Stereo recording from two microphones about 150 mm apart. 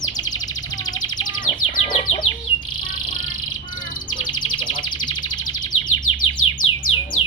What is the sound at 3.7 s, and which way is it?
Bird, 65° left (ahead or behind).